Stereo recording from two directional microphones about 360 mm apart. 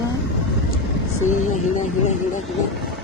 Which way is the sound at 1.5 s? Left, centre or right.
Centre.